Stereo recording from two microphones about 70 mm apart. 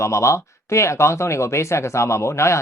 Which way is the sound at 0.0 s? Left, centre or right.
Left.